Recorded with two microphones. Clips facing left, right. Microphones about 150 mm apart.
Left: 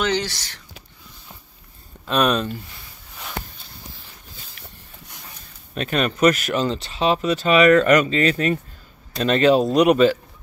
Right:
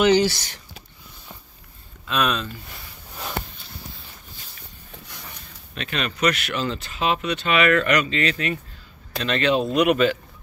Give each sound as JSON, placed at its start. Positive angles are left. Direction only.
{"t": 0.0, "sound": "speech", "side_deg": -10}
{"t": 2.0, "sound": "speech", "side_deg": 40}
{"t": 5.8, "sound": "speech", "side_deg": 45}